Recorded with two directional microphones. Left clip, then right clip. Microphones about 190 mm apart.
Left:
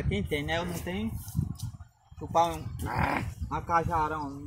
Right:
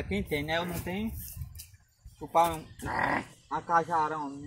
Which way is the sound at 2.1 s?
5° left (ahead or behind).